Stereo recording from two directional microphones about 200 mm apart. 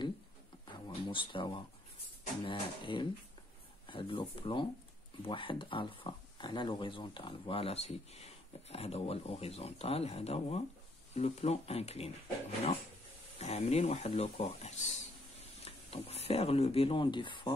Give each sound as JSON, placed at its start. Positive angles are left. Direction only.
{"t": 0.8, "sound": "speech", "side_deg": 25}
{"t": 13.4, "sound": "speech", "side_deg": 35}